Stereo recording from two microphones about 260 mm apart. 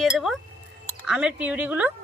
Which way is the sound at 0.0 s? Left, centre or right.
Centre.